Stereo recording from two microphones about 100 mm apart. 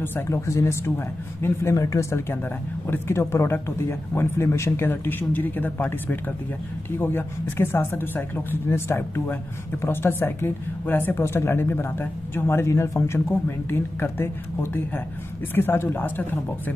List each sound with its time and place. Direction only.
0.0 s speech: 25° left (ahead or behind)